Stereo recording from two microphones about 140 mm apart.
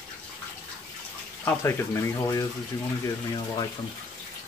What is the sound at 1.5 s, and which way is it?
Speech, 20° left (ahead or behind).